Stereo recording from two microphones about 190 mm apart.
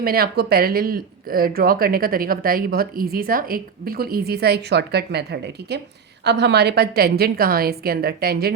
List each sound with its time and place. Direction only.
0.0 s a woman's voice: 50° right (ahead or behind)